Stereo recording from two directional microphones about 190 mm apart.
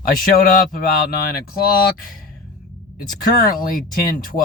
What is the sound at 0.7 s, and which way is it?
Speech, 55° left (ahead or behind).